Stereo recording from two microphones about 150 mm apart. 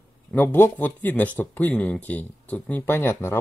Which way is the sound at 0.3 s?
15° left (ahead or behind).